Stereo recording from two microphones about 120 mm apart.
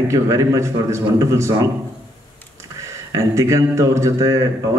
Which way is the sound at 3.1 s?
25° right (ahead or behind).